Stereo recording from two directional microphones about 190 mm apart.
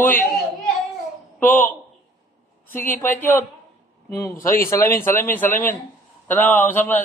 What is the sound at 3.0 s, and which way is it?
A man's voice, 10° left (ahead or behind).